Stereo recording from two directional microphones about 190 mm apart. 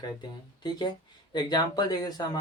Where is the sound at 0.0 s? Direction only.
20° left (ahead or behind).